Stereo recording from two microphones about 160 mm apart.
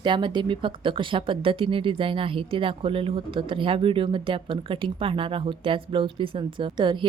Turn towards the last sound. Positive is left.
turn(degrees=-30)  # may be behind; listen again after turning